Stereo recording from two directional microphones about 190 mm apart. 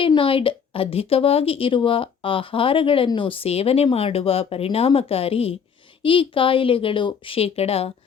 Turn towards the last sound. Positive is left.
turn(degrees=30)  # may be behind; listen again after turning